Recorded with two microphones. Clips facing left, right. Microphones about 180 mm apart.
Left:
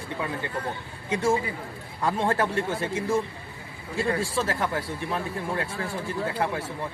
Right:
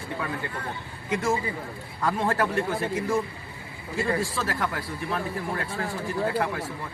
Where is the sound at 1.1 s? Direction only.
30° left (ahead or behind).